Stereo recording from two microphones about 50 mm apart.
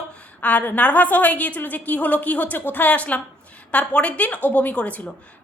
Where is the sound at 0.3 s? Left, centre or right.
Left.